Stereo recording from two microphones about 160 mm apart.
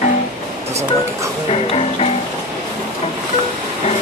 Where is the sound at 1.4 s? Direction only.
35° left (ahead or behind).